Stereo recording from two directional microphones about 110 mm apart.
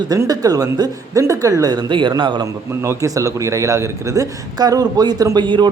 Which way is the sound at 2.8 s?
30° right (ahead or behind).